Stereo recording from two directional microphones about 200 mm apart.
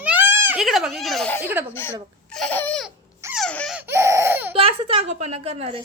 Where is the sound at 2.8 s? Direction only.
5° right (ahead or behind).